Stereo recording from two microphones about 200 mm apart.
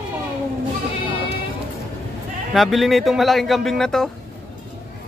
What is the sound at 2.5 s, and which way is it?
Speech, centre (ahead or behind).